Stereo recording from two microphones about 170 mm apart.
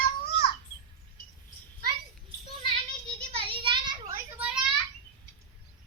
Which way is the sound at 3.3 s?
30° right (ahead or behind).